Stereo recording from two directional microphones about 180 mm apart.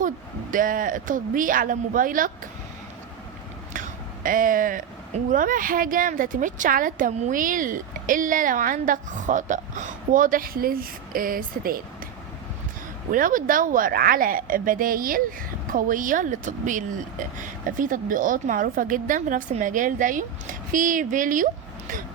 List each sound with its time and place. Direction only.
0.5 s speech: 50° right (ahead or behind)
3.7 s speech: 50° right (ahead or behind)
13.1 s speech: 50° right (ahead or behind)